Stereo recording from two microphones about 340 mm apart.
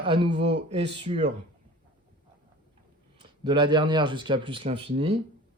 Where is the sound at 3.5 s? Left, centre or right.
Centre.